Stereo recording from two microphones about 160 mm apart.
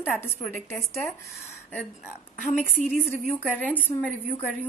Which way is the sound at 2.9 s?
10° left (ahead or behind).